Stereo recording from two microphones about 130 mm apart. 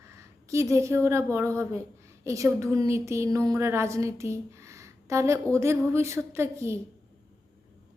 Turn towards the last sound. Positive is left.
turn(degrees=-20)  # may be behind; listen again after turning